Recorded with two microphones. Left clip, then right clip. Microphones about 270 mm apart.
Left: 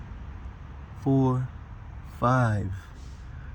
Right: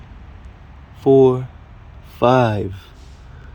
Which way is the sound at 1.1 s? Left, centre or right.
Centre.